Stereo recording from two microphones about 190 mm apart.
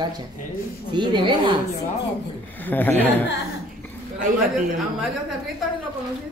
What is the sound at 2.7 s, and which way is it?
Speech, 10° left (ahead or behind).